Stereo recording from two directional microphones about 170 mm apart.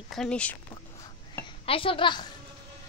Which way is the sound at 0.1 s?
5° left (ahead or behind).